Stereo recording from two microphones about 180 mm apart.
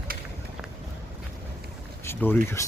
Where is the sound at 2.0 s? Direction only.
10° left (ahead or behind).